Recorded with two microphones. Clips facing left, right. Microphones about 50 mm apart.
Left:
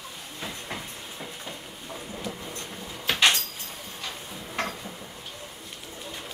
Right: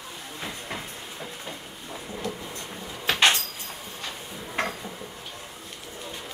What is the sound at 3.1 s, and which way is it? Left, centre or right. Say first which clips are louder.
Cupboard open or close: right 1 dB; right.